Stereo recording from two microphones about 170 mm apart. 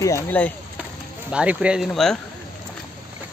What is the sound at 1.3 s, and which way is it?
Speech, 5° right (ahead or behind).